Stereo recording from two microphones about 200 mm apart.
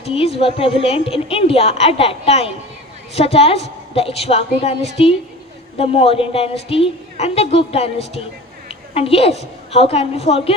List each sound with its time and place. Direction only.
0.0 s a woman's voice: 30° left (ahead or behind)